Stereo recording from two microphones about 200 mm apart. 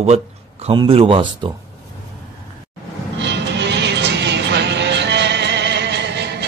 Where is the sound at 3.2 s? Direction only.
60° right (ahead or behind).